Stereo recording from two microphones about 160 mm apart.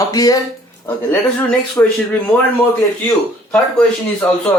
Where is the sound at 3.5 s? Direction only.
5° left (ahead or behind).